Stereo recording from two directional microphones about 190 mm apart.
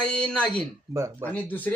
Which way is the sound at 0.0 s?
5° left (ahead or behind).